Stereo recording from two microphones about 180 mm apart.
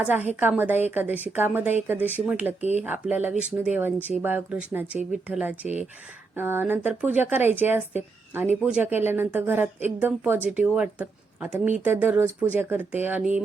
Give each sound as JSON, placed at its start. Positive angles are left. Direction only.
{"t": 0.0, "sound": "speech", "side_deg": -10}
{"t": 2.6, "sound": "speech", "side_deg": -40}
{"t": 2.8, "sound": "speech", "side_deg": -10}